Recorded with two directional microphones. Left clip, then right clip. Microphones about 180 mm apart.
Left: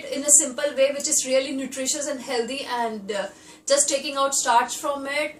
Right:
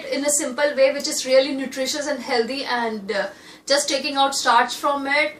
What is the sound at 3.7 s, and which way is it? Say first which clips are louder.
A woman's voice: right 1 dB; centre (ahead or behind).